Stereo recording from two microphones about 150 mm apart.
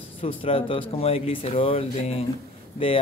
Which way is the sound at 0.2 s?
40° left (ahead or behind).